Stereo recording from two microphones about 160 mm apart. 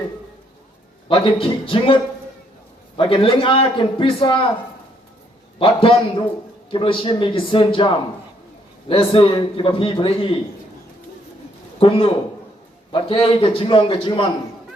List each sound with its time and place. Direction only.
1.0 s a man's voice: 35° left (ahead or behind)
3.0 s a man's voice: 35° left (ahead or behind)
5.5 s a man's voice: 35° left (ahead or behind)
11.8 s a man's voice: 35° left (ahead or behind)